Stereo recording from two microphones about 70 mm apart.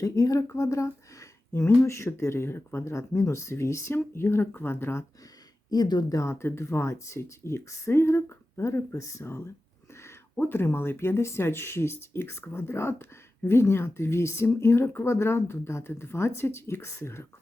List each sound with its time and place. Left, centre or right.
0.0 s speech: left
5.7 s speech: left
6.1 s speech: left
6.4 s speech: left